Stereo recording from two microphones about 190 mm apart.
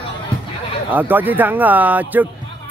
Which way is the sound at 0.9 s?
10° right (ahead or behind).